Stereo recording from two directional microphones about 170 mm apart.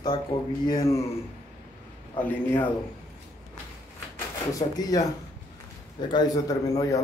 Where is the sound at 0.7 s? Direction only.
20° left (ahead or behind).